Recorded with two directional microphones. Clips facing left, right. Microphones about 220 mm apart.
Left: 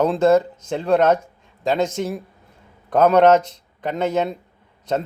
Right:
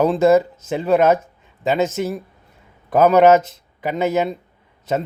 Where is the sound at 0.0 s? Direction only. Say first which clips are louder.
Right 2 dB; 10° right (ahead or behind).